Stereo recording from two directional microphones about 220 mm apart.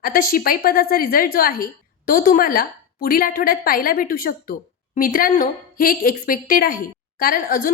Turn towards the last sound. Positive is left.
turn(degrees=40)  # may be behind; listen again after turning